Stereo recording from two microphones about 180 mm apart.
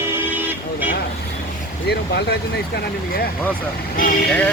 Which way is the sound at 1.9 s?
65° left (ahead or behind).